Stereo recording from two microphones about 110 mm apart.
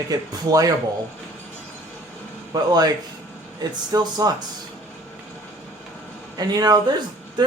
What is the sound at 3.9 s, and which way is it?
Speech, 35° right (ahead or behind).